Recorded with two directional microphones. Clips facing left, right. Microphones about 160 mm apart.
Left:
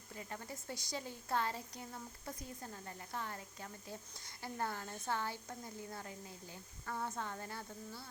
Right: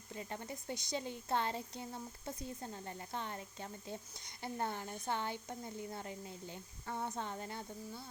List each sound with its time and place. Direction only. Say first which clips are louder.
0.1 s speech: right 3 dB; 25° right (ahead or behind)